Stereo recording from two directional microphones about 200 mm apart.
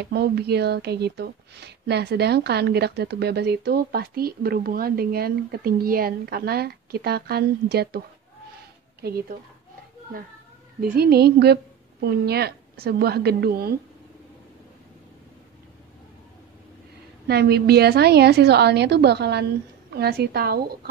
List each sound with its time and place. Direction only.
0.0 s speech: 55° right (ahead or behind)
10.8 s speech: 50° right (ahead or behind)
17.3 s a woman's voice: 55° right (ahead or behind)